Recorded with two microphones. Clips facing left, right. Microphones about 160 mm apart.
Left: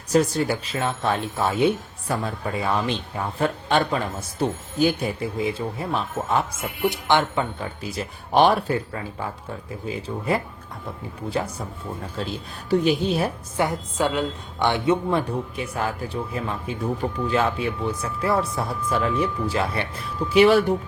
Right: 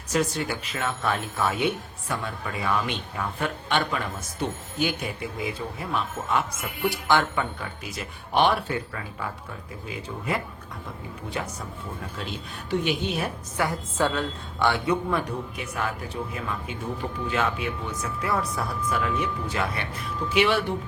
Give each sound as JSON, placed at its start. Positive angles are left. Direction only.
{"t": 0.1, "sound": "speech", "side_deg": 35}
{"t": 12.7, "sound": "speech", "side_deg": 35}
{"t": 13.7, "sound": "a woman's voice", "side_deg": 15}